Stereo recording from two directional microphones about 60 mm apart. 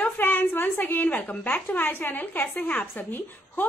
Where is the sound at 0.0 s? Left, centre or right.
Left.